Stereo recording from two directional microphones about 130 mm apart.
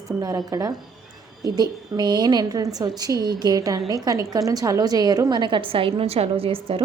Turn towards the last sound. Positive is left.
turn(degrees=-45)  # may be behind; listen again after turning